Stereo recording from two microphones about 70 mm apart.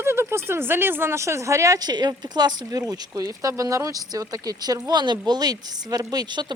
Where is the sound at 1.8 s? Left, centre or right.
Right.